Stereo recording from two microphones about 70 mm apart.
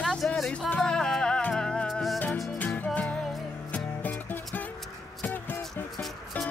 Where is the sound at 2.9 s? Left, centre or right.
Centre.